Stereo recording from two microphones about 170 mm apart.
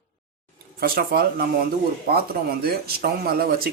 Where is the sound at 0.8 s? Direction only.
65° right (ahead or behind).